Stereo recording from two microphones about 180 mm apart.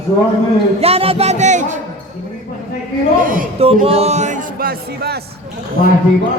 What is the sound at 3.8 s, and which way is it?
Music, 35° right (ahead or behind).